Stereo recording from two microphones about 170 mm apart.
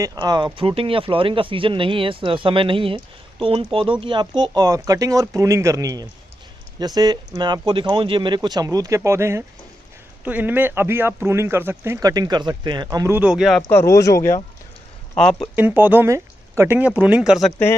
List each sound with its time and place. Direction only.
0.0 s a man's voice: 20° right (ahead or behind)
13.2 s speech: 5° right (ahead or behind)
13.7 s speech: 15° left (ahead or behind)
15.1 s speech: 5° left (ahead or behind)
15.5 s a man's voice: 10° right (ahead or behind)